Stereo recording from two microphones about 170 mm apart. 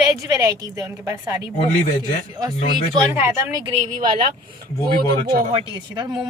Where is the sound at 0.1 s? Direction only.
20° right (ahead or behind).